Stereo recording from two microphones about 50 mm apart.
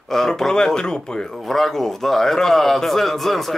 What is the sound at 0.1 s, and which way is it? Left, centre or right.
A man's voice, centre.